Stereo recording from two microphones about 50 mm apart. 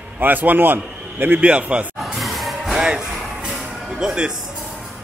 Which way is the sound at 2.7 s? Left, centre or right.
Centre.